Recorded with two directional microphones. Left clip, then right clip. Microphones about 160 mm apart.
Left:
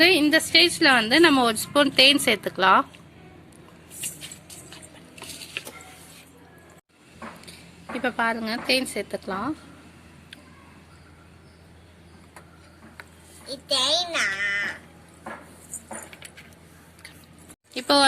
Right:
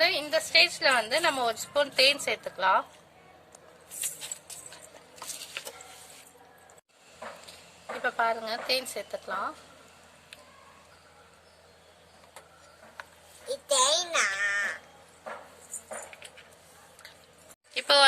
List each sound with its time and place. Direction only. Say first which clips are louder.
0.0 s a woman's voice: left 8 dB; 50° left (ahead or behind)
8.0 s a woman's voice: left 3 dB; 50° left (ahead or behind)
13.5 s a child's voice: left 2 dB; 50° right (ahead or behind)
17.7 s a woman's voice: left 2 dB; 50° left (ahead or behind)